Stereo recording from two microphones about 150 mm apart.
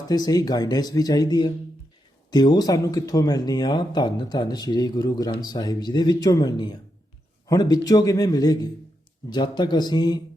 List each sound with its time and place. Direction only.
0.1 s speech: 25° left (ahead or behind)